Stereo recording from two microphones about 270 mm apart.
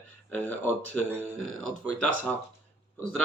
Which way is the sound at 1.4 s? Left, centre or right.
Right.